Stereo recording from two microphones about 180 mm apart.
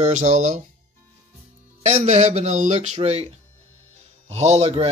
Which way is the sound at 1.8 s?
40° right (ahead or behind).